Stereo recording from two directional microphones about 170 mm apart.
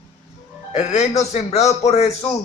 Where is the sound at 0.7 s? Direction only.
40° left (ahead or behind).